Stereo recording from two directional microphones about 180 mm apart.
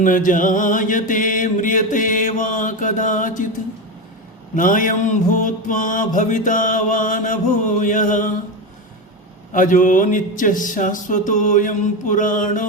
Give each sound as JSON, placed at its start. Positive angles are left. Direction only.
{"t": 0.0, "sound": "mantra", "side_deg": 45}
{"t": 4.5, "sound": "mantra", "side_deg": 50}
{"t": 9.5, "sound": "mantra", "side_deg": 45}